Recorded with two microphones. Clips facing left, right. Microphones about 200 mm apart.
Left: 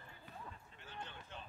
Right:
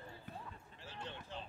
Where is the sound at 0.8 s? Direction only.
30° right (ahead or behind).